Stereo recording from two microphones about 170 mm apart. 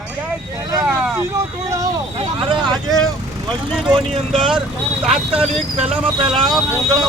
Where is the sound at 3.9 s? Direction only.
30° right (ahead or behind).